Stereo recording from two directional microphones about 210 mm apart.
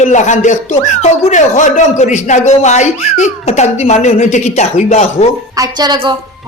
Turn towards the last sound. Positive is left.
turn(degrees=-20)  # may be behind; listen again after turning